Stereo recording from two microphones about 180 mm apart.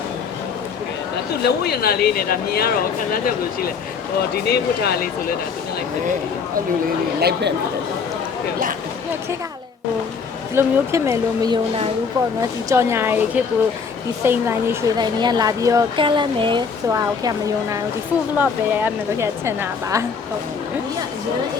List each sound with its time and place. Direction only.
1.5 s speech: 60° left (ahead or behind)
4.4 s speech: 65° left (ahead or behind)
7.2 s speech: 65° right (ahead or behind)
10.5 s a woman's voice: 15° right (ahead or behind)
12.6 s a woman's voice: 15° right (ahead or behind)